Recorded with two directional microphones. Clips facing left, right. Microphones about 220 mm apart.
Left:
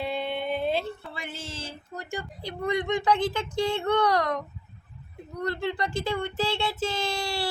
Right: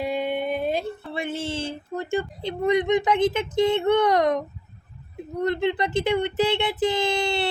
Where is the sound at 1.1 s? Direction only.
25° right (ahead or behind).